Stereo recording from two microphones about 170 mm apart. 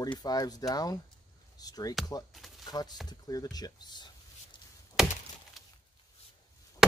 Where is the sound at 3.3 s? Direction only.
20° left (ahead or behind).